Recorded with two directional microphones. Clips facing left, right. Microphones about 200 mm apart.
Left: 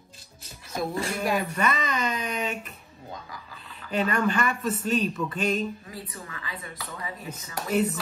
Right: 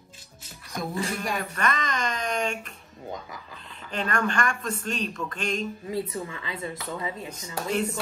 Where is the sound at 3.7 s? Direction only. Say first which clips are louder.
Left 3 dB; 5° left (ahead or behind).